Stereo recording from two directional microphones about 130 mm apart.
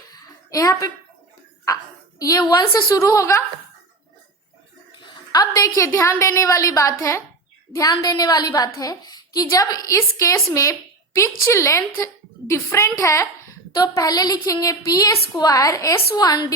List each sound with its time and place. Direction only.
0.1 s a sound: 25° left (ahead or behind)
2.6 s a woman's voice: 25° left (ahead or behind)
4.9 s a woman's voice: 30° left (ahead or behind)